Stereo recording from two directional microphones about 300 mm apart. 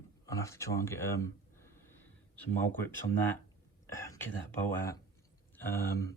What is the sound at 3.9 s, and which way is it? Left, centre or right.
Whispering, centre.